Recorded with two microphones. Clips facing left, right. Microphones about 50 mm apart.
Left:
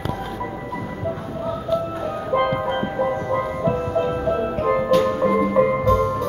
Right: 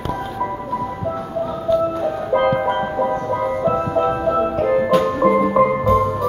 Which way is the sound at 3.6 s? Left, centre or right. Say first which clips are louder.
Right 4 dB; centre.